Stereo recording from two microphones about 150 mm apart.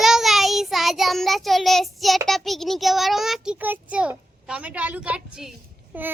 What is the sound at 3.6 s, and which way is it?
A child's voice, 10° right (ahead or behind).